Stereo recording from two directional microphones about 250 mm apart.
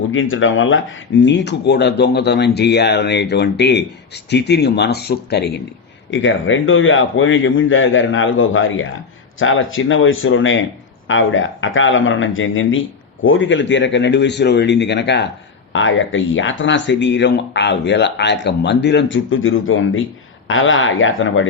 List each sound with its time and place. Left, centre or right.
0.1 s speech: left